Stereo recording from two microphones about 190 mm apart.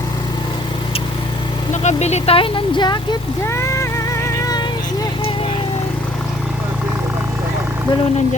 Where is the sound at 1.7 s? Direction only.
35° left (ahead or behind); by 4.7 s 20° left (ahead or behind).